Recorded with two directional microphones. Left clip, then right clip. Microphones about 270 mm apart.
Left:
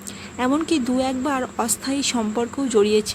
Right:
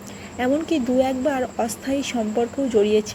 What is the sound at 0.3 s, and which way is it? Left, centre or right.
Speech, centre.